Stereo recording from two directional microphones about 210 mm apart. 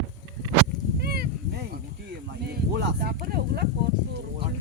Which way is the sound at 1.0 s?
50° right (ahead or behind).